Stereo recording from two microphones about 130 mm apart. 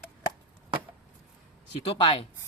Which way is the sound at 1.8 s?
45° left (ahead or behind).